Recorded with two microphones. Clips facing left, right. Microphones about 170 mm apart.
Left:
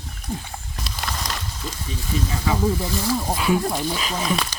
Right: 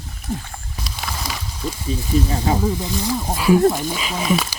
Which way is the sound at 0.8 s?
Centre (ahead or behind).